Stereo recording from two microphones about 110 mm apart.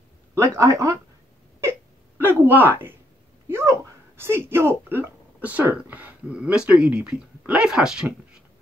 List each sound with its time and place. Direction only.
0.3 s speech: 30° right (ahead or behind)
1.6 s a sound: 20° right (ahead or behind)
4.2 s speech: 20° right (ahead or behind); by 8.1 s 5° right (ahead or behind)